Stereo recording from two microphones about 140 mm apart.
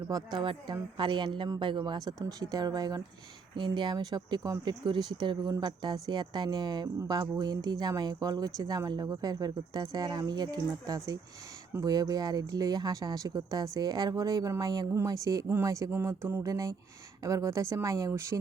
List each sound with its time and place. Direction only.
0.1 s a woman's voice: 30° right (ahead or behind)